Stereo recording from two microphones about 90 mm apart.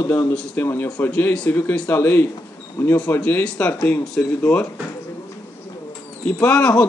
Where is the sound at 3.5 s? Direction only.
20° left (ahead or behind).